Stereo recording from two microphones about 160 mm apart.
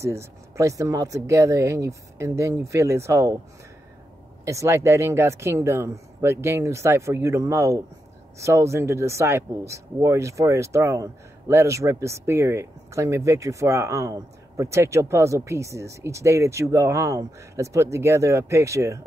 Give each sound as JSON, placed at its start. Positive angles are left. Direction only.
{"t": 0.0, "sound": "speech", "side_deg": -20}
{"t": 4.5, "sound": "speech", "side_deg": -20}